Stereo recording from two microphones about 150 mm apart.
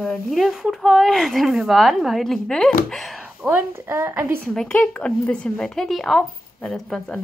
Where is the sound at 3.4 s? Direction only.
15° right (ahead or behind).